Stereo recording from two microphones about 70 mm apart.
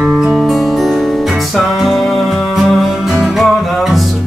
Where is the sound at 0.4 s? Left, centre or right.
Centre.